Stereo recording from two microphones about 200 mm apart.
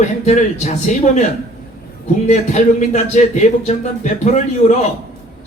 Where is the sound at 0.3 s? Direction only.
35° left (ahead or behind).